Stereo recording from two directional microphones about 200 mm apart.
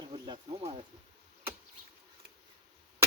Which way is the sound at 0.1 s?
30° right (ahead or behind).